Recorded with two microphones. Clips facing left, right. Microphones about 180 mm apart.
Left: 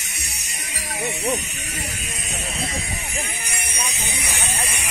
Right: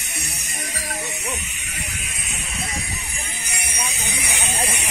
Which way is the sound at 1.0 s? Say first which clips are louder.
Left 7 dB; 30° left (ahead or behind).